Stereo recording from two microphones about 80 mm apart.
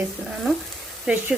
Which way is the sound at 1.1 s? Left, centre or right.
Centre.